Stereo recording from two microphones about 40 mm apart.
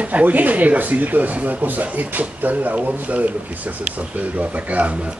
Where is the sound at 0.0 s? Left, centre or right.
Right.